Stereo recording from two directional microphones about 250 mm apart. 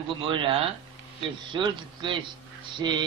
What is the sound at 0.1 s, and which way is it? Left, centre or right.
A man's voice, centre.